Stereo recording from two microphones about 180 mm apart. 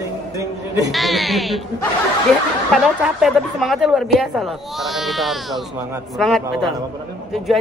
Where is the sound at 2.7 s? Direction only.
Centre (ahead or behind).